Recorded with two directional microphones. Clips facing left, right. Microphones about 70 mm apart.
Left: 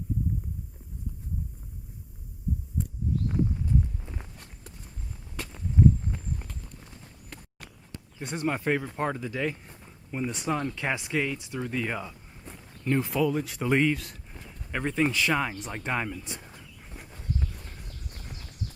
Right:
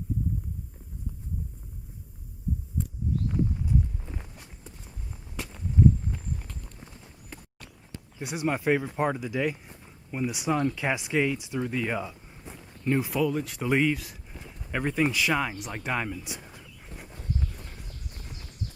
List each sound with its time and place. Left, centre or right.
4.0 s walk: centre
6.7 s clip-clop: centre
8.2 s speech: centre
10.8 s speech: centre
11.6 s speech: centre
16.2 s a sound: centre